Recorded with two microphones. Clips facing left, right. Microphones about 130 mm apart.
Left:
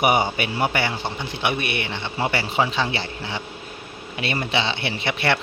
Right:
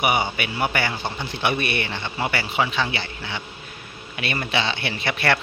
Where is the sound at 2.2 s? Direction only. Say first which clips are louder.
Left 2 dB; 30° left (ahead or behind).